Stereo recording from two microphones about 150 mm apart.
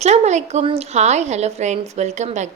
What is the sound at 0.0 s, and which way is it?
A woman's voice, 50° right (ahead or behind).